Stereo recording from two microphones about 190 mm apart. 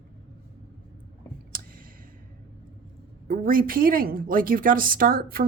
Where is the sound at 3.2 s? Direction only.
45° right (ahead or behind).